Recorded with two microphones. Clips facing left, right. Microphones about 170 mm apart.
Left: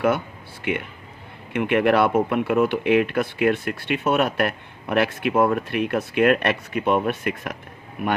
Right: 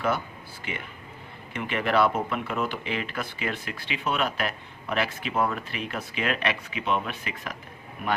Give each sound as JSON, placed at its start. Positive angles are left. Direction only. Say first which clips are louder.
{"t": 1.5, "sound": "speech", "louder": "left 6 dB", "side_deg": 60}